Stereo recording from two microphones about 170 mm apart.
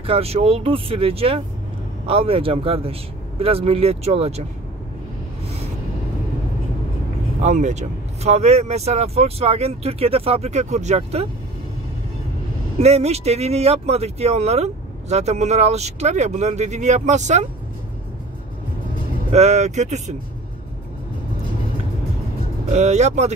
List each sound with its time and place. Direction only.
0.0 s speech: 35° right (ahead or behind)
7.4 s speech: 45° right (ahead or behind)
12.8 s speech: 40° right (ahead or behind)
19.3 s speech: 40° right (ahead or behind)
22.7 s speech: 40° right (ahead or behind)